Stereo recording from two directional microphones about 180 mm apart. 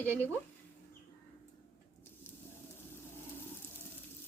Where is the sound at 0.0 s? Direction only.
10° left (ahead or behind).